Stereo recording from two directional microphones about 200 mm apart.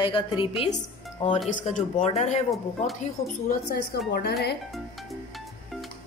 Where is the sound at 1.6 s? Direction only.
35° left (ahead or behind).